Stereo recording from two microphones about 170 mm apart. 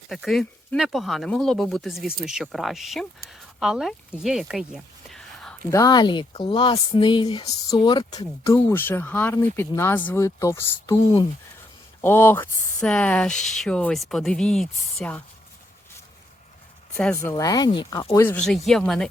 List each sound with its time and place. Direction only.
0.1 s speech: centre (ahead or behind)
5.7 s speech: 20° left (ahead or behind)
12.0 s speech: 15° left (ahead or behind)
17.2 s speech: 20° left (ahead or behind)
18.0 s speech: 15° left (ahead or behind)
18.4 s speech: centre (ahead or behind)